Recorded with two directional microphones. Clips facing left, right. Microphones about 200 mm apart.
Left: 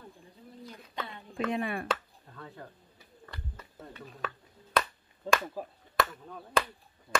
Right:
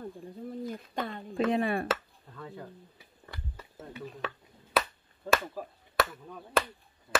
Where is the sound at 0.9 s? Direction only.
45° right (ahead or behind).